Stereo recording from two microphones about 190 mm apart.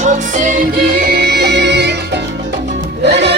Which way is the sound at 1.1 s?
60° right (ahead or behind).